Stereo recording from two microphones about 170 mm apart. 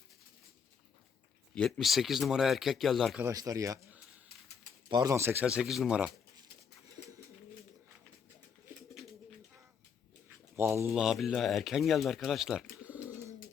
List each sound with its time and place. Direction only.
1.5 s speech: 5° left (ahead or behind)
3.2 s speech: 20° right (ahead or behind)
4.9 s speech: 20° right (ahead or behind); by 6.1 s 5° right (ahead or behind)
10.2 s speech: 15° right (ahead or behind)
13.1 s bird: 15° right (ahead or behind)